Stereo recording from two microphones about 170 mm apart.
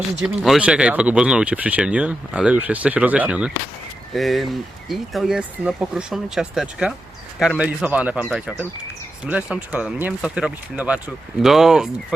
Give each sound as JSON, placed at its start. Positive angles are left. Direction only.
{"t": 0.2, "sound": "speech", "side_deg": 0}